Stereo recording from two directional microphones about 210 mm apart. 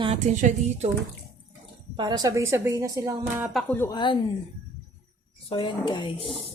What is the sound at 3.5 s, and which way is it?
Speech, centre (ahead or behind).